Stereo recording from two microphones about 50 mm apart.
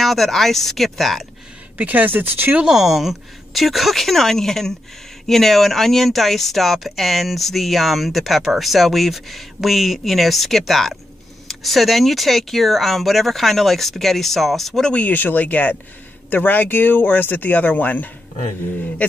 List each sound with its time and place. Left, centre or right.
0.0 s speech: centre
1.8 s speech: right
2.6 s speech: centre
14.9 s speech: left